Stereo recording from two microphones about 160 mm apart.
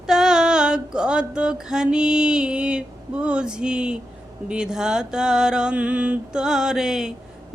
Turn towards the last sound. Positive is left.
turn(degrees=-5)  # may be behind; listen again after turning